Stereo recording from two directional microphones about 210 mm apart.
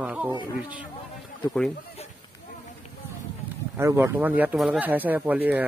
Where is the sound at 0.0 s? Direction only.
5° right (ahead or behind).